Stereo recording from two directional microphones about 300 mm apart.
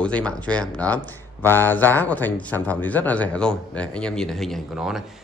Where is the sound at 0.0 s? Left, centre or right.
Centre.